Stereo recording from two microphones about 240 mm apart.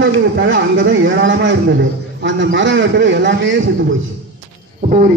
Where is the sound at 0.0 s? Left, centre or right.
Right.